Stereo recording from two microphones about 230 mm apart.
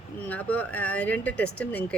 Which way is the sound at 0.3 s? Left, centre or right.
Centre.